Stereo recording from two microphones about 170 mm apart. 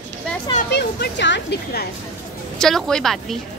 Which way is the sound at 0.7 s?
75° left (ahead or behind).